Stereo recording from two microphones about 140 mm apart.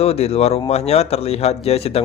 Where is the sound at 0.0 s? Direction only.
45° left (ahead or behind).